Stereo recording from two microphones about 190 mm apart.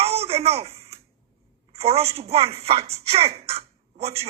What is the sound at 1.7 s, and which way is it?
Speech, 30° right (ahead or behind).